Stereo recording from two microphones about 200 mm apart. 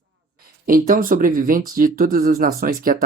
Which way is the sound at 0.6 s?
45° right (ahead or behind).